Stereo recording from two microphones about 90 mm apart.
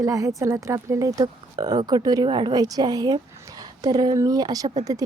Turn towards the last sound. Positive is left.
turn(degrees=-40)  # may be behind; listen again after turning